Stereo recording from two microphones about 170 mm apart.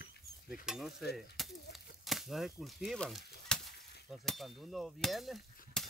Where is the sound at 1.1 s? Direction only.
Centre (ahead or behind).